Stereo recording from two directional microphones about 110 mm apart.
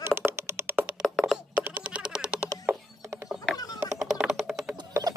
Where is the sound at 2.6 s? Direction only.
25° right (ahead or behind).